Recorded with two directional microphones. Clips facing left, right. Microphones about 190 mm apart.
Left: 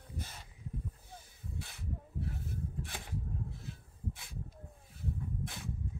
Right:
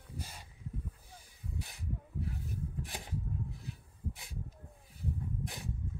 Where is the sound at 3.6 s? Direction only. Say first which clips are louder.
Even; 15° right (ahead or behind).